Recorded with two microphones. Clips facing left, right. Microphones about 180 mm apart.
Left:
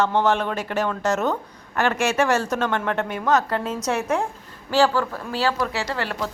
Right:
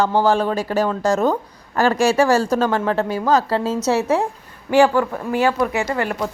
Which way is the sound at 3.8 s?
25° right (ahead or behind).